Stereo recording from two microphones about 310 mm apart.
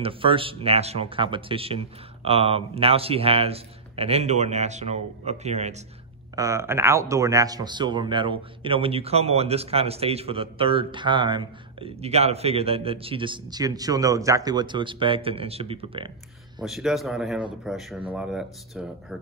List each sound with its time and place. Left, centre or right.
0.0 s speech: centre
6.3 s speech: centre
16.6 s speech: centre